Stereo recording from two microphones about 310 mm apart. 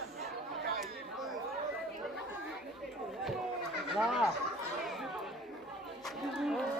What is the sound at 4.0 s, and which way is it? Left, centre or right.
Speech, centre.